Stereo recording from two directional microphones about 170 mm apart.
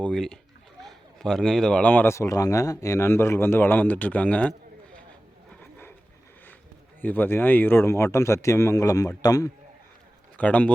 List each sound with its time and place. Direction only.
0.0 s speech: 5° left (ahead or behind)
7.0 s speech: 10° left (ahead or behind)
10.3 s a man's voice: 10° left (ahead or behind)